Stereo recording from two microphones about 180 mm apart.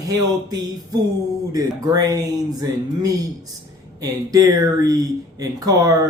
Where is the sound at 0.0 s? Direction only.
20° right (ahead or behind).